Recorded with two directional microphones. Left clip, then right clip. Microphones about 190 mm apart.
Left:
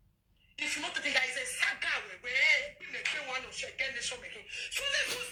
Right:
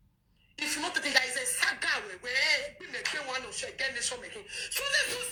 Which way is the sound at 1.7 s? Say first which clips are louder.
Right 3 dB; 50° right (ahead or behind).